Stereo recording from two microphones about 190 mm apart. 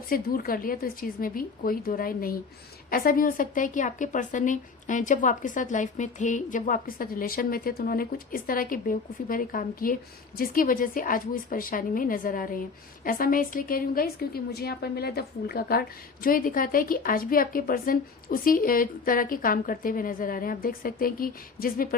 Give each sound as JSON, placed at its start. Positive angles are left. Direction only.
{"t": 0.1, "sound": "a woman's voice", "side_deg": 50}